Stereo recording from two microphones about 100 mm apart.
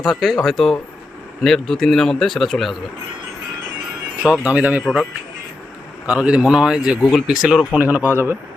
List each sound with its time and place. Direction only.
0.0 s speech: centre (ahead or behind)
4.3 s speech: 15° right (ahead or behind)
6.1 s speech: 10° right (ahead or behind)
7.8 s speech: 15° right (ahead or behind)